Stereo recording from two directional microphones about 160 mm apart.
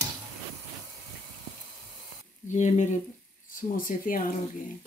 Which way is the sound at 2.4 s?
50° left (ahead or behind).